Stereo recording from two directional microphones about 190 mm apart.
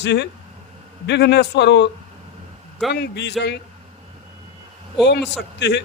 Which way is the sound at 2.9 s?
60° left (ahead or behind).